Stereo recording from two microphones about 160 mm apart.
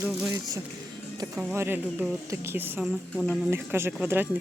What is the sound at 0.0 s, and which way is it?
Speech, 5° right (ahead or behind).